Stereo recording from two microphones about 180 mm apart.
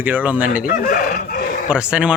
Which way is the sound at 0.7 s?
50° left (ahead or behind).